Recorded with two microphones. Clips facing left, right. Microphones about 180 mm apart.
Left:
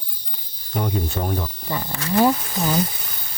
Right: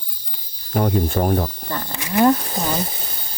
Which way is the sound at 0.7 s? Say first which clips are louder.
Right 6 dB; 55° right (ahead or behind).